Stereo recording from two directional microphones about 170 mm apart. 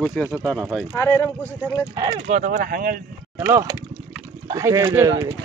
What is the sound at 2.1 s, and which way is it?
Speech, 45° right (ahead or behind).